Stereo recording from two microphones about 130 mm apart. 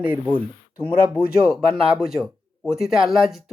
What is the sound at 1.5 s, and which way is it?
Speech, 5° right (ahead or behind).